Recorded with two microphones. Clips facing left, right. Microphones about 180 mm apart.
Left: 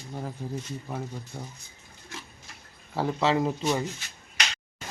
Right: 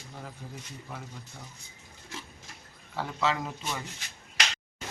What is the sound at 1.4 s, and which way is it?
Speech, 40° left (ahead or behind).